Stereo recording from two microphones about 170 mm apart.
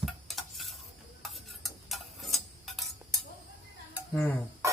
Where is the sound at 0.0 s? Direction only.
Centre (ahead or behind).